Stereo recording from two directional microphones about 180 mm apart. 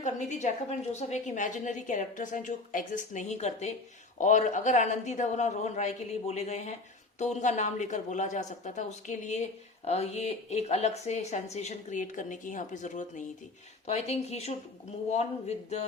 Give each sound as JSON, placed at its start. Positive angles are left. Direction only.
{"t": 0.0, "sound": "a woman's voice", "side_deg": 40}